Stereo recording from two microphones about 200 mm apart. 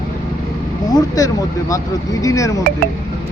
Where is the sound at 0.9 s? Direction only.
15° left (ahead or behind).